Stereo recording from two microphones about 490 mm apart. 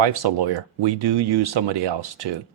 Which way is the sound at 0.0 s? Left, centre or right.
Right.